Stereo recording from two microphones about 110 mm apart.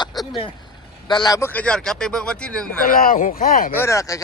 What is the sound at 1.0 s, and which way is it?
Speech, 40° left (ahead or behind).